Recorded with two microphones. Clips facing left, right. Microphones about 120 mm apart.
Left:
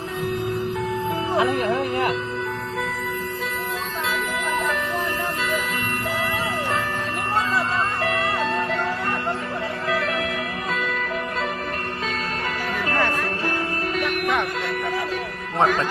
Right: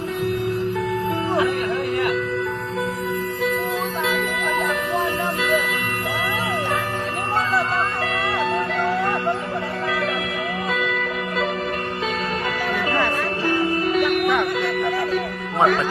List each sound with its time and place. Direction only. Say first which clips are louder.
1.4 s music: left 3 dB; 25° left (ahead or behind)
12.9 s music: left 1 dB; centre (ahead or behind)
15.5 s music: right 2 dB; centre (ahead or behind)